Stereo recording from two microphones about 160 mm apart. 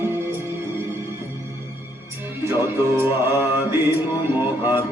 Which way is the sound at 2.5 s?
15° right (ahead or behind).